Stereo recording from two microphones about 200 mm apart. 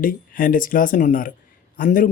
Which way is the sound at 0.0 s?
45° left (ahead or behind).